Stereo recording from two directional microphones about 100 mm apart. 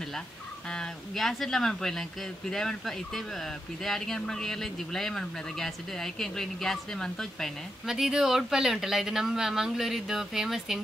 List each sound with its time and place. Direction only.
0.7 s speech: 5° left (ahead or behind)